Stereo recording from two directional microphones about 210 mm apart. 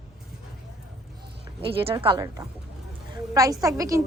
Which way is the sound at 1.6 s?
25° right (ahead or behind).